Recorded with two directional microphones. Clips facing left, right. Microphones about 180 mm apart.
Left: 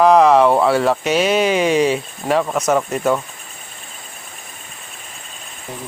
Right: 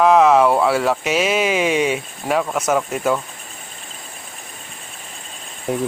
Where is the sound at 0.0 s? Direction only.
Centre (ahead or behind).